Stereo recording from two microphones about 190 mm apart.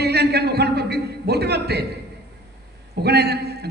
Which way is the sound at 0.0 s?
60° right (ahead or behind).